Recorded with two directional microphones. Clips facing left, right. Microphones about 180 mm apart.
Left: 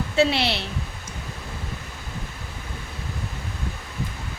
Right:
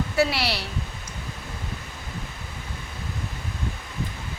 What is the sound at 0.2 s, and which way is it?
Speech, 25° left (ahead or behind).